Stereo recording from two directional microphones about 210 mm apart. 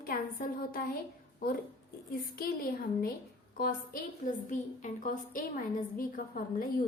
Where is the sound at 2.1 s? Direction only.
45° left (ahead or behind).